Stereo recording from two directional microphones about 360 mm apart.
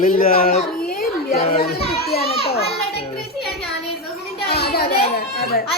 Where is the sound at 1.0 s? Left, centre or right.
Centre.